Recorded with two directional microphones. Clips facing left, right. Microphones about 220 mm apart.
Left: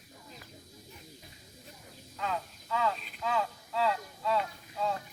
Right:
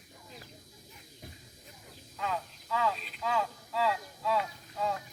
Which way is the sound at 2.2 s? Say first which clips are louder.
Even; centre (ahead or behind).